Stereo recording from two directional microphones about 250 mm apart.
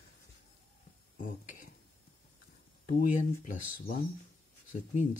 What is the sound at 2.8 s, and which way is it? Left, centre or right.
Speech, left.